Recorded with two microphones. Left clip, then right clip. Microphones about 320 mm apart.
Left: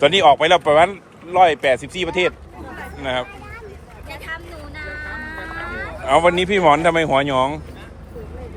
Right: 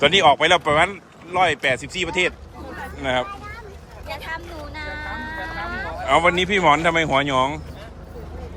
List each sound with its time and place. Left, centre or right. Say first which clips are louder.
0.0 s speech: left 2 dB; centre
4.3 s vehicle: even; right
6.1 s speech: left 2 dB; centre